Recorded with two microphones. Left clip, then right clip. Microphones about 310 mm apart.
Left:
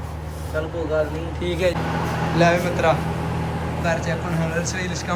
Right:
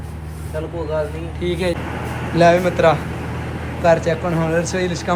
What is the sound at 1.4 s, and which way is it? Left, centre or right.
Speech, centre.